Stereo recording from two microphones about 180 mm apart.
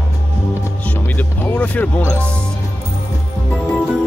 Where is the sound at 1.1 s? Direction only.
10° left (ahead or behind).